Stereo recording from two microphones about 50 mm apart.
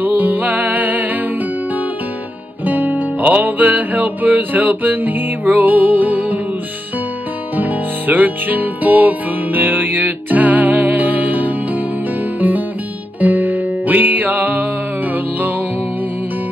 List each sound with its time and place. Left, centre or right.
0.0 s music: right
2.6 s music: right
7.5 s music: right